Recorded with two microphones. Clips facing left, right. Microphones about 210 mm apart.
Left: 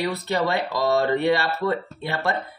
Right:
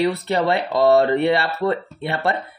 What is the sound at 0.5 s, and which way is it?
Speech, 65° right (ahead or behind).